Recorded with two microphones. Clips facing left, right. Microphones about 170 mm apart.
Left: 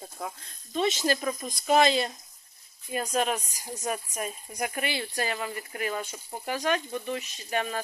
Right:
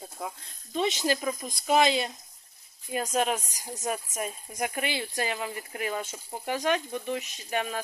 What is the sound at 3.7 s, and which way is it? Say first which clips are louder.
Speech: even; centre (ahead or behind).